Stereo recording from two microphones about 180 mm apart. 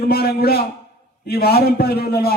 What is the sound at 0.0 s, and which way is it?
A man's voice, 60° left (ahead or behind).